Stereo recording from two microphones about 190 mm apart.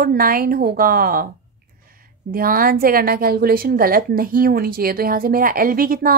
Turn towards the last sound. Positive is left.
turn(degrees=-50)  # may be behind; listen again after turning